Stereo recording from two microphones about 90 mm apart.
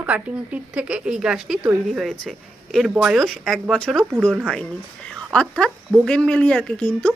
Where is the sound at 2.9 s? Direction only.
10° right (ahead or behind).